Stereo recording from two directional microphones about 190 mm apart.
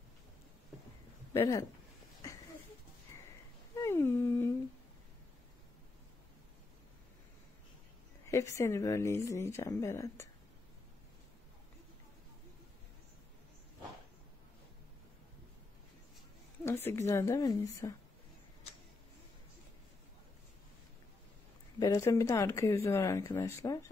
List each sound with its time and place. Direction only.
1.3 s speech: 15° left (ahead or behind)
3.7 s humming: 15° left (ahead or behind)
8.3 s speech: 15° left (ahead or behind)
16.6 s speech: 15° left (ahead or behind)
21.7 s speech: 20° left (ahead or behind)